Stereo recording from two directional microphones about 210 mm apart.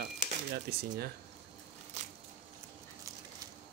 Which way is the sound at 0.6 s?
45° right (ahead or behind).